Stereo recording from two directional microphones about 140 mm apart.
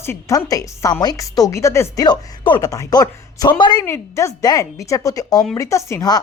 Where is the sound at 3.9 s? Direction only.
20° left (ahead or behind).